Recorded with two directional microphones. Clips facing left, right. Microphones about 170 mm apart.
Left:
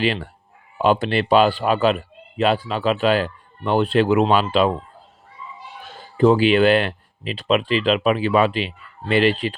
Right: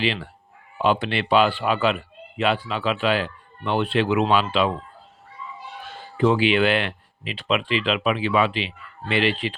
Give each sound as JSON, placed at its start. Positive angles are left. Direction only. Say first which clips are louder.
{"t": 0.0, "sound": "speech", "louder": "left 3 dB", "side_deg": 45}
{"t": 6.1, "sound": "speech", "louder": "left 4 dB", "side_deg": 40}